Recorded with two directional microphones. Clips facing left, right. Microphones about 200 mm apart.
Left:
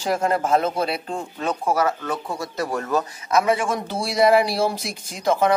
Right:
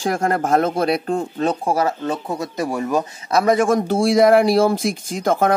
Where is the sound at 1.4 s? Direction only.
35° right (ahead or behind); by 3.2 s 15° right (ahead or behind).